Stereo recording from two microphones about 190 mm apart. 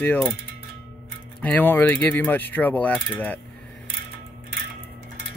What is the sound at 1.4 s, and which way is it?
Speech, 10° left (ahead or behind).